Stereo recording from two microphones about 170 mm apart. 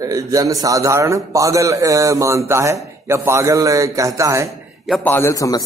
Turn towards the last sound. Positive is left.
turn(degrees=20)  # may be behind; listen again after turning